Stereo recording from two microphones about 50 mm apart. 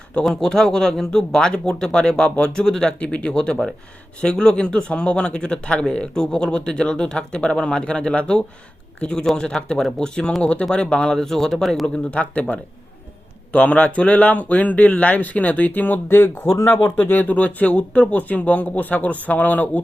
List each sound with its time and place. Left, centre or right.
0.3 s a man's voice: centre
12.1 s a man's voice: left
16.0 s speech: left
16.8 s speech: left